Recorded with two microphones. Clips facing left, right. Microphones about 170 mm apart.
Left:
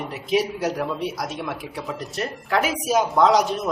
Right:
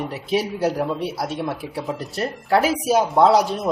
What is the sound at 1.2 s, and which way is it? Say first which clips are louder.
A man's voice: right 3 dB; 30° right (ahead or behind).